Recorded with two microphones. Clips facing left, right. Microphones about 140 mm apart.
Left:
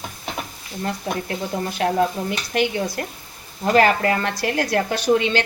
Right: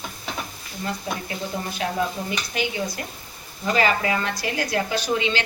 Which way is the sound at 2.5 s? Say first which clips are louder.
Left 7 dB; 70° left (ahead or behind).